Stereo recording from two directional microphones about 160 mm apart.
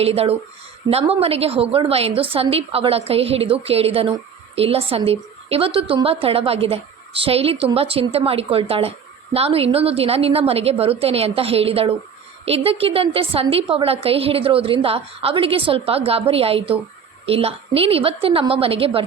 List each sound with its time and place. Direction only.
0.0 s a woman's voice: 40° right (ahead or behind)